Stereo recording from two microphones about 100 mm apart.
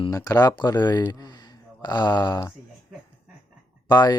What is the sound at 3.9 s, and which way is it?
Speech, 45° left (ahead or behind).